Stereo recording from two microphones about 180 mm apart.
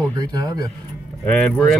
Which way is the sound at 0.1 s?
20° right (ahead or behind).